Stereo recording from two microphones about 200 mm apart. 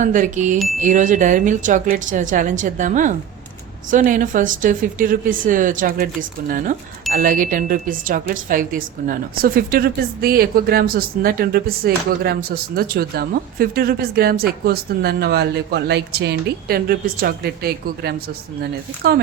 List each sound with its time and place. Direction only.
0.0 s a woman's voice: 40° right (ahead or behind)
7.1 s speech: 45° right (ahead or behind)